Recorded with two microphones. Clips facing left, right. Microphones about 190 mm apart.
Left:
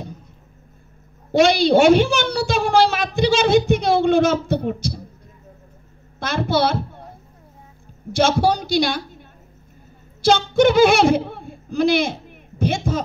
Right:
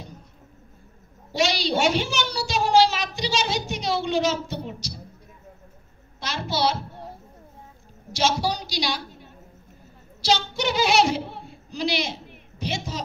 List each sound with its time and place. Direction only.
1.3 s a woman's voice: 55° left (ahead or behind)
6.1 s a woman's voice: 55° left (ahead or behind)
8.1 s a woman's voice: 55° left (ahead or behind)